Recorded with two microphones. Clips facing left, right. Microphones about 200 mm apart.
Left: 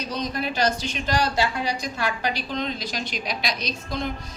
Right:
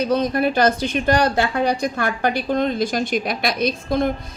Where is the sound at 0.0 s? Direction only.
55° right (ahead or behind).